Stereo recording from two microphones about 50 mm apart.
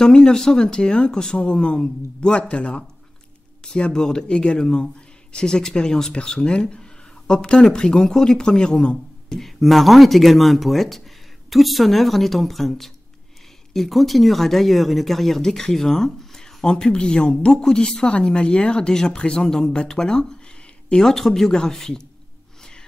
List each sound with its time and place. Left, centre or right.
0.0 s speech: centre
9.4 s speech: centre
22.6 s gasp: centre